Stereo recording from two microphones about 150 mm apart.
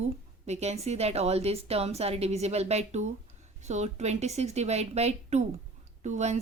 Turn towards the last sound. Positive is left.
turn(degrees=-50)  # may be behind; listen again after turning